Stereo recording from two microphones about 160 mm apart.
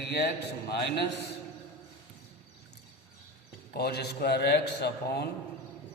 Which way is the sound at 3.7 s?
85° left.